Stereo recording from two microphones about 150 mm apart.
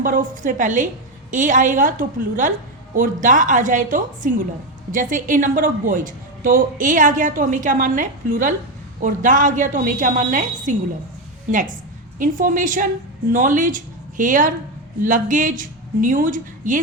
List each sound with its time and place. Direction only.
0.0 s a woman's voice: 65° right (ahead or behind)